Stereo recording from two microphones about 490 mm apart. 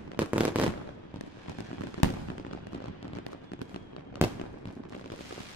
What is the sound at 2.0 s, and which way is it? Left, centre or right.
Fireworks, left.